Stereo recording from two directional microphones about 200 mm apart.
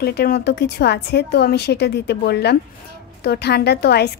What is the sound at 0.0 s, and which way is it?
A woman's voice, 50° left (ahead or behind).